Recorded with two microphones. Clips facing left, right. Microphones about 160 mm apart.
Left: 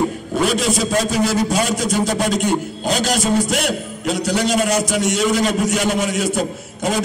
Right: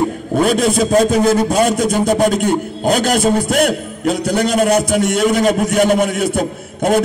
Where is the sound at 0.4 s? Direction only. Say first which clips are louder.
Right 4 dB; 55° right (ahead or behind).